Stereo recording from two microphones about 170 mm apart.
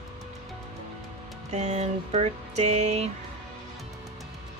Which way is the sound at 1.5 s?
40° right (ahead or behind).